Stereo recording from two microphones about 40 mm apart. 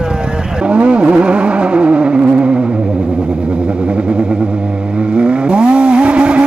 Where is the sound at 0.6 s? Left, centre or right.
Right.